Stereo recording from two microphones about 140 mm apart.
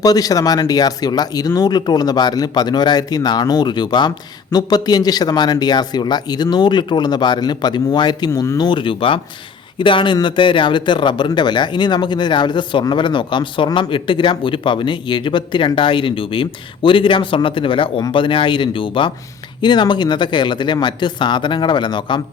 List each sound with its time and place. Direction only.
0.0 s speech: 25° left (ahead or behind)
8.3 s speech: 20° left (ahead or behind)